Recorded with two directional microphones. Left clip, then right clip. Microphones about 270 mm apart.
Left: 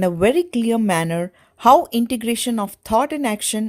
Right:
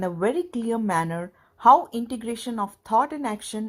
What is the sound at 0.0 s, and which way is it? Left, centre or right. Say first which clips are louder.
Speech: left 8 dB; left.